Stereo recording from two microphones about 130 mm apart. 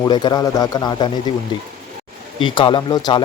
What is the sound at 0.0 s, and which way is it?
Speech, 35° left (ahead or behind).